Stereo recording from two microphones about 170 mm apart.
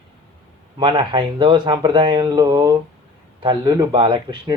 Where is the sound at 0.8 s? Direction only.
30° right (ahead or behind).